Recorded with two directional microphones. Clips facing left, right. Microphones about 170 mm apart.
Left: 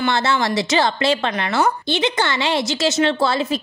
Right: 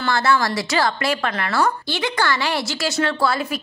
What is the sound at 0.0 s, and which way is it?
A woman's voice, 25° left (ahead or behind).